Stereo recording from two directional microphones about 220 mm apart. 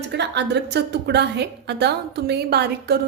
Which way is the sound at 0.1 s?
50° right (ahead or behind).